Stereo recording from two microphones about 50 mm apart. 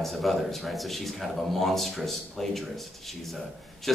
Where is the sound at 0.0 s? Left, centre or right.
Centre.